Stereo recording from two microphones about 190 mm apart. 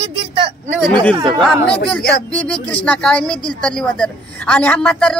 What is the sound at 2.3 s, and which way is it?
Speech, 5° left (ahead or behind).